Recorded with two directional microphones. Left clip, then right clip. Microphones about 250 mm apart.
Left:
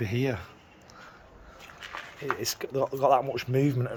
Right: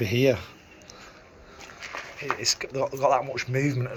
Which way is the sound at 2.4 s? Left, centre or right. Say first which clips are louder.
Right 3 dB; left.